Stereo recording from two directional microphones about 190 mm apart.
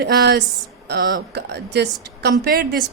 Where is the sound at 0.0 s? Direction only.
55° right (ahead or behind).